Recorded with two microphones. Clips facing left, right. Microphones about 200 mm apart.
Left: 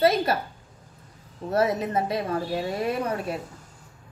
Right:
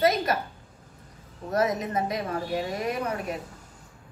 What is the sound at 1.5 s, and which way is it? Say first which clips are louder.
A woman's voice: left 2 dB; 30° left (ahead or behind).